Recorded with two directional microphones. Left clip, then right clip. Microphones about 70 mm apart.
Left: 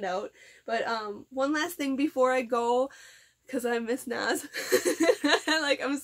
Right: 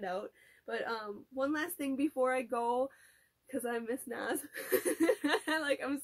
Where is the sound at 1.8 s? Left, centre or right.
Left.